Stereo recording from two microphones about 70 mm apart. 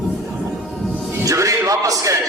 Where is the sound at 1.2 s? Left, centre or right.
Right.